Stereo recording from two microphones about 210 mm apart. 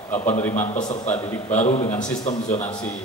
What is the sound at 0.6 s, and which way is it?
Mantra, 35° left (ahead or behind).